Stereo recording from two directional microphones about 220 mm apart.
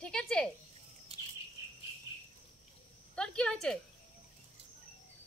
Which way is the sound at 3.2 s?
5° left (ahead or behind).